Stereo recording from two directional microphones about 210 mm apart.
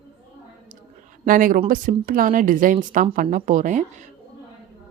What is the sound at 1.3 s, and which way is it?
Speech, 40° right (ahead or behind).